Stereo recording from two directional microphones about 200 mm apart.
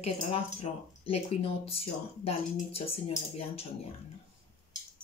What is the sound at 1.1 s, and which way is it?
Speech, 30° left (ahead or behind).